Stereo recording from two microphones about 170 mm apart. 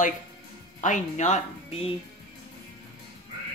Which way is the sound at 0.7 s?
45° left (ahead or behind).